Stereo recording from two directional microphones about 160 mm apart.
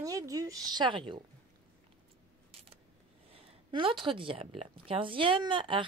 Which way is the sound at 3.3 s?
35° right (ahead or behind).